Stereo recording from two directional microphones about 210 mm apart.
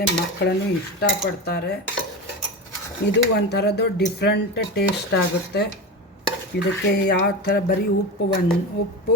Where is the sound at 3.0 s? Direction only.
50° left (ahead or behind).